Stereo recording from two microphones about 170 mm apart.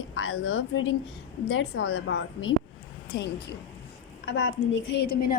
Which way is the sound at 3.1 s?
75° left (ahead or behind).